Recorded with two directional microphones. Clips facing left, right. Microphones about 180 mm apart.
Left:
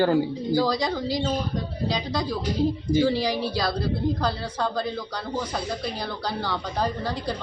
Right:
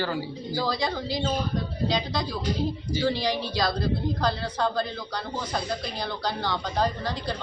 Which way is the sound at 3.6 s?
10° left (ahead or behind).